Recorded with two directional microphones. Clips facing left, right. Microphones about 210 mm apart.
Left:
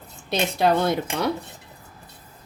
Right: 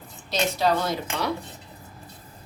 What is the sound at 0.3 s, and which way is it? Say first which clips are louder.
Speech: left 2 dB; 55° left (ahead or behind).